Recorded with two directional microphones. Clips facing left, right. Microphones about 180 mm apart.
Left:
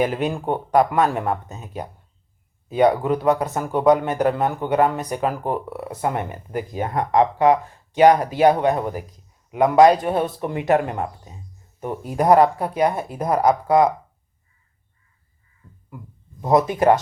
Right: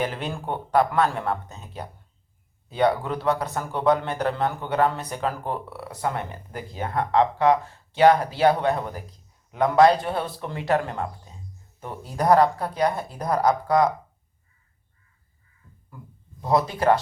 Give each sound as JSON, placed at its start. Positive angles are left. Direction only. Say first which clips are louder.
{"t": 0.0, "sound": "a man's voice", "louder": "left 7 dB", "side_deg": 10}
{"t": 16.4, "sound": "speech", "louder": "left 5 dB", "side_deg": 15}